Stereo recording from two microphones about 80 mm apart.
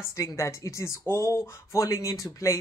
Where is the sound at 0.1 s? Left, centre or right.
Left.